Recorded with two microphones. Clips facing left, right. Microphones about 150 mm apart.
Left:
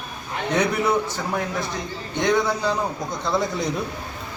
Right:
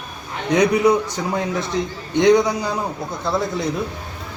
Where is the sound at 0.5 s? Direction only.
15° right (ahead or behind).